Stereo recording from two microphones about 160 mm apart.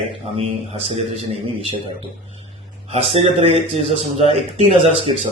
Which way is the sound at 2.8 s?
40° right (ahead or behind).